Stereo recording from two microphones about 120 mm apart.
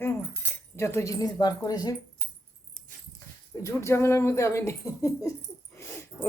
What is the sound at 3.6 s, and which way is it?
Speech, 25° left (ahead or behind).